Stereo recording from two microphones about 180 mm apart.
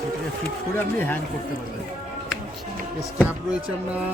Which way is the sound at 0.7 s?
10° left (ahead or behind).